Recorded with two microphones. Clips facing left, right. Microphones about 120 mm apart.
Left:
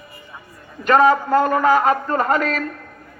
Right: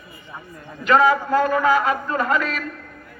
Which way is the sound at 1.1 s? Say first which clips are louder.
Left 2 dB; 35° left (ahead or behind).